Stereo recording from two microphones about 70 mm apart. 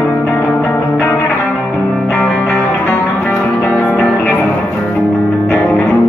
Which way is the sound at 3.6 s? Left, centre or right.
Centre.